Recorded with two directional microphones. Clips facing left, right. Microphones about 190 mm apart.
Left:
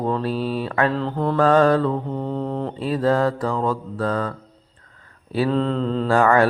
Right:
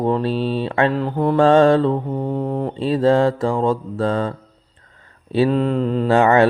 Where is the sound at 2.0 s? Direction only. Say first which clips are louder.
Right 3 dB; 15° right (ahead or behind).